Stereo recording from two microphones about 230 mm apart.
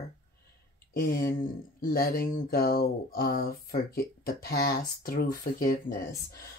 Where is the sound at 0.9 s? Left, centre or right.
Left.